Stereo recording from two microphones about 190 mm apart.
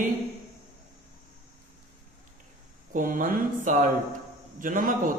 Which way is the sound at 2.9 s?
45° right (ahead or behind).